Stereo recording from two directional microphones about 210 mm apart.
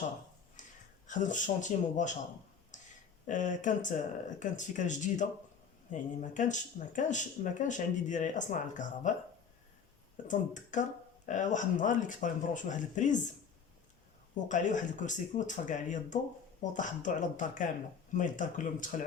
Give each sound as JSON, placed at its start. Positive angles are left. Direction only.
{"t": 1.0, "sound": "speech", "side_deg": 35}
{"t": 2.7, "sound": "a sound", "side_deg": 35}
{"t": 3.2, "sound": "speech", "side_deg": 35}
{"t": 10.2, "sound": "speech", "side_deg": 35}
{"t": 14.3, "sound": "speech", "side_deg": 35}